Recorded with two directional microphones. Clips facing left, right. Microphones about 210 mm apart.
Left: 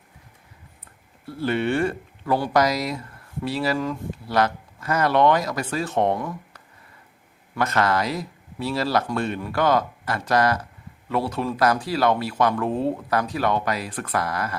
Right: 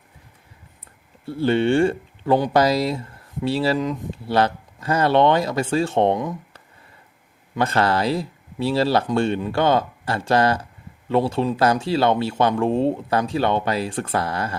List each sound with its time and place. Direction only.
1.2 s speech: 25° right (ahead or behind)